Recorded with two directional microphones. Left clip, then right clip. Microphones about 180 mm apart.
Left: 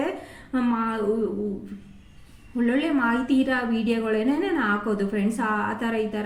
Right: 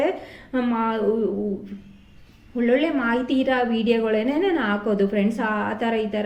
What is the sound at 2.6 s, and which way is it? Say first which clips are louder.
A woman's voice: right 3 dB; 20° right (ahead or behind).